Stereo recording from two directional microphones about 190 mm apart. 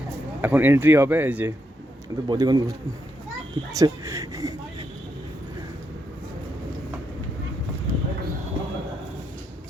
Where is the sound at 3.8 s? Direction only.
15° right (ahead or behind).